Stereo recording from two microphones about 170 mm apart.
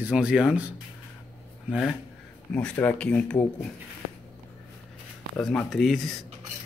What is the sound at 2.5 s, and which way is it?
Speech, 5° left (ahead or behind).